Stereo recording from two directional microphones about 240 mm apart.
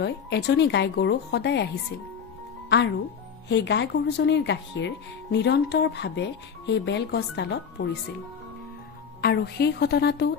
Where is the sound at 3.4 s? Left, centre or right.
Left.